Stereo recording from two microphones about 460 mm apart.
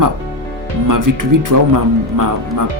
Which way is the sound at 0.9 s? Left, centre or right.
Right.